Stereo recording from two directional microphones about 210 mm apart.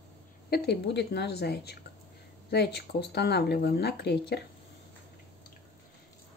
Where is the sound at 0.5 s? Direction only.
50° left (ahead or behind).